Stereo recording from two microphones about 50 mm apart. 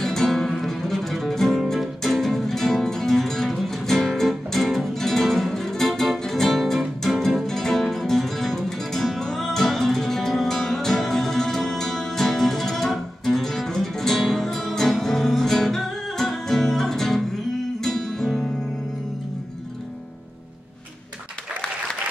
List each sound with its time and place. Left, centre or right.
0.0 s music: centre